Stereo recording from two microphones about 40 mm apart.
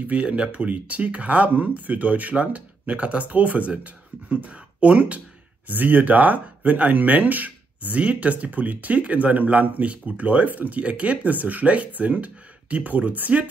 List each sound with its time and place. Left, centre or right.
0.0 s speech: right
5.7 s speech: right